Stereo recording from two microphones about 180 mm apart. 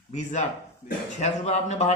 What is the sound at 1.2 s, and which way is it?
Speech, 40° left (ahead or behind).